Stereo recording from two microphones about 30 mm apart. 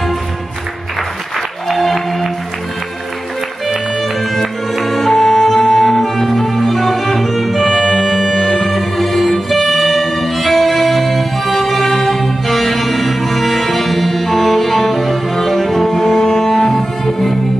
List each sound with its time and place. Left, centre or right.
1.7 s music: centre
4.0 s music: centre
11.9 s music: centre
12.2 s music: centre
16.2 s music: centre